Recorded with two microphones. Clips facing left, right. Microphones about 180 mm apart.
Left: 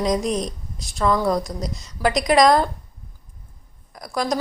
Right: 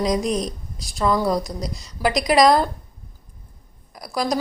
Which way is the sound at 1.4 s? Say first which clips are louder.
Even; 35° right (ahead or behind).